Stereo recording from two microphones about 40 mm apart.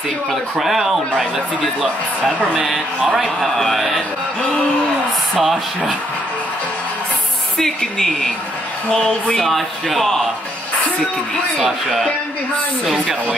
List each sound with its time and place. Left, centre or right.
0.3 s speech: centre
3.0 s a man's voice: centre
3.5 s speech: centre
4.4 s a sound: left
5.4 s speech: centre
7.5 s speech: centre
11.5 s speech: centre